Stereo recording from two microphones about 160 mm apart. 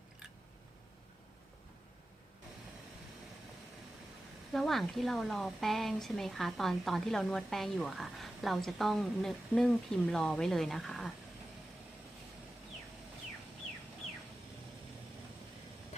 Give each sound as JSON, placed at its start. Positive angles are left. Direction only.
{"t": 4.5, "sound": "speech", "side_deg": 0}